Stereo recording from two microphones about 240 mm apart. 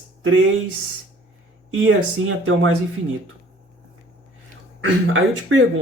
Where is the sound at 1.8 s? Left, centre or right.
Right.